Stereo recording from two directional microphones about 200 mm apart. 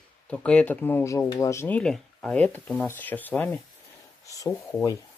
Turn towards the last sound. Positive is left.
turn(degrees=15)  # may be behind; listen again after turning